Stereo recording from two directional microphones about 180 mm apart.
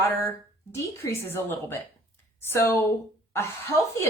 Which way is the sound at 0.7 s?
15° left (ahead or behind).